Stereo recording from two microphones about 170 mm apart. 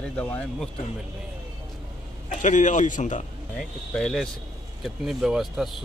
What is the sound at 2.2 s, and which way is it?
A man's voice, 45° left (ahead or behind).